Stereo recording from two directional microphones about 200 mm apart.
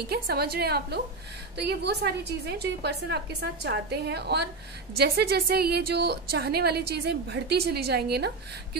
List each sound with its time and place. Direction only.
0.1 s a woman's voice: 50° right (ahead or behind)